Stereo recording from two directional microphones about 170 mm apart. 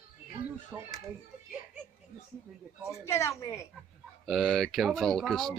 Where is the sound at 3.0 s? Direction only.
15° left (ahead or behind).